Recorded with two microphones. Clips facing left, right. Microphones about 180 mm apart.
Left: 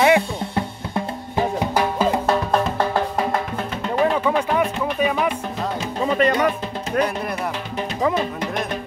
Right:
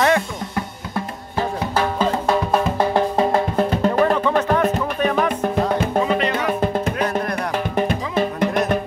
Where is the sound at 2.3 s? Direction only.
Centre (ahead or behind).